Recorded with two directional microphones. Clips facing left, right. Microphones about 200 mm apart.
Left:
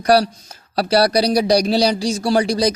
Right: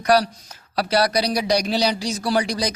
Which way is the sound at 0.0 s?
35° left (ahead or behind).